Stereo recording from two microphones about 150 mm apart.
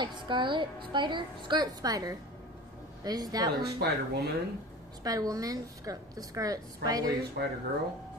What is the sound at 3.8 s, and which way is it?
Speech, 90° right.